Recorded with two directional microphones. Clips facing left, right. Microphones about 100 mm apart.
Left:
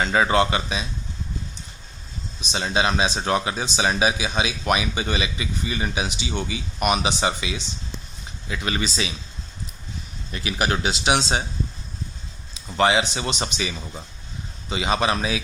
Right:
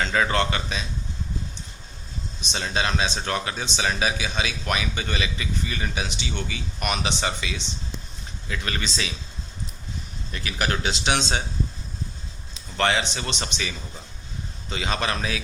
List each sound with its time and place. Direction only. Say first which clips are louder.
0.0 s speech: left 3 dB; 15° left (ahead or behind)
2.4 s speech: left 4 dB; 15° left (ahead or behind)
10.3 s speech: left 3 dB; 15° left (ahead or behind)
12.6 s speech: left 4 dB; 15° left (ahead or behind)